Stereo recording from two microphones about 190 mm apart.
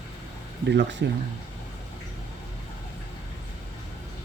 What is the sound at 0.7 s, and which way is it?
Speech, 65° right (ahead or behind).